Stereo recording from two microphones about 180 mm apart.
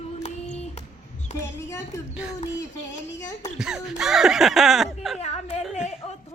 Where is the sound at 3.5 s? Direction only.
5° right (ahead or behind).